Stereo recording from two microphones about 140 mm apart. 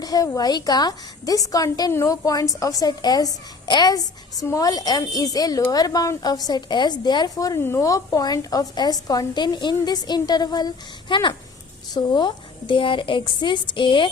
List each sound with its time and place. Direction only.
0.0 s a woman's voice: 25° left (ahead or behind)